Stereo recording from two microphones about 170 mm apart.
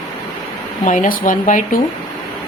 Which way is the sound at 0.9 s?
50° left (ahead or behind).